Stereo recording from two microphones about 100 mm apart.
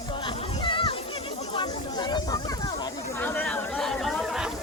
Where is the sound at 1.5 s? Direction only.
50° left (ahead or behind).